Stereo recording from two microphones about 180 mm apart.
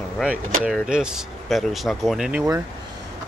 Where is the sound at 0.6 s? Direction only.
5° right (ahead or behind).